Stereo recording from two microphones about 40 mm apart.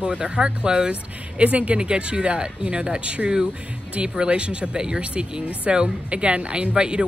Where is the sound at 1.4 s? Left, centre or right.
Right.